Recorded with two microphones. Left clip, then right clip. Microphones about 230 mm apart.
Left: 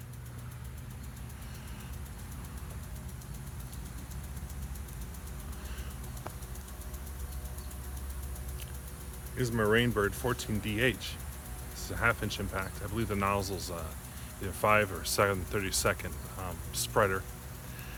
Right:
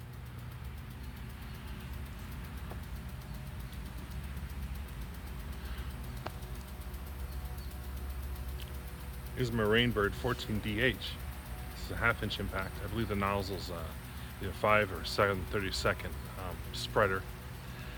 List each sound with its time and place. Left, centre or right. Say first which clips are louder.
9.4 s speech: left 2 dB; centre